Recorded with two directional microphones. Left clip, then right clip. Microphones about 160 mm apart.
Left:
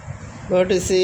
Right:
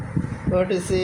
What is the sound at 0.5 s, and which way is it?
Speech, 55° left (ahead or behind).